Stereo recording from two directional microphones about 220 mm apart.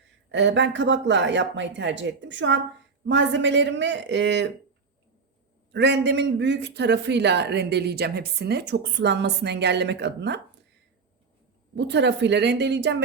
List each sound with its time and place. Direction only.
0.3 s a man's voice: 55° right (ahead or behind)
5.7 s a man's voice: 50° right (ahead or behind)
11.7 s a man's voice: 50° right (ahead or behind)